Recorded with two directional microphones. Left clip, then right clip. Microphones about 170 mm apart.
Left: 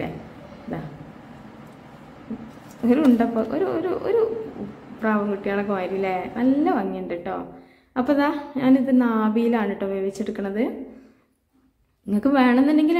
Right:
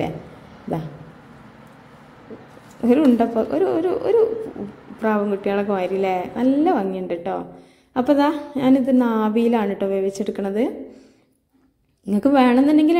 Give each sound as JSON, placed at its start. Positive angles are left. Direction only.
{"t": 2.8, "sound": "a woman's voice", "side_deg": -25}
{"t": 12.1, "sound": "a woman's voice", "side_deg": -25}